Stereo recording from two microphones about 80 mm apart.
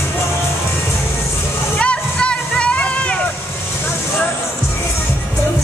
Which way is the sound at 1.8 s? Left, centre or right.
Centre.